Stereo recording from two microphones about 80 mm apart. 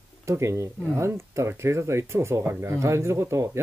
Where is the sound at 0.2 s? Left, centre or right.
Right.